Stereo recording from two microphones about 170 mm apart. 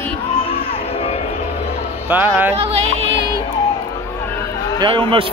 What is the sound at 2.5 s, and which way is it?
Speech, 35° right (ahead or behind).